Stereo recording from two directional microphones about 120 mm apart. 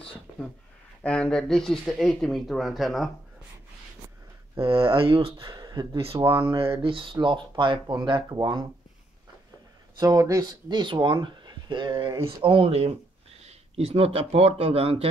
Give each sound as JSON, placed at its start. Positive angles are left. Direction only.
{"t": 1.0, "sound": "speech", "side_deg": 10}
{"t": 4.6, "sound": "speech", "side_deg": -45}
{"t": 5.4, "sound": "speech", "side_deg": -35}
{"t": 6.7, "sound": "speech", "side_deg": -45}
{"t": 9.9, "sound": "speech", "side_deg": -30}
{"t": 12.4, "sound": "speech", "side_deg": -50}